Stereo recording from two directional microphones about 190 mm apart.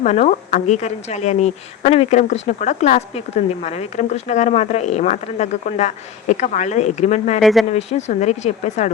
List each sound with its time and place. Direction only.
0.0 s speech: 40° left (ahead or behind)